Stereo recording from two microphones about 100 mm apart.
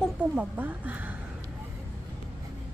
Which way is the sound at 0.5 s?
15° right (ahead or behind).